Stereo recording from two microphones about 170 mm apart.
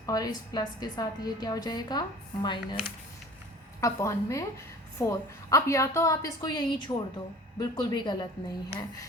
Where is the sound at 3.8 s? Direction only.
15° left (ahead or behind).